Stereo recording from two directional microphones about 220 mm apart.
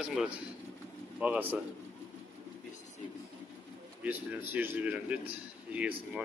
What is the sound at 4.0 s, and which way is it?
A man's voice, 5° right (ahead or behind).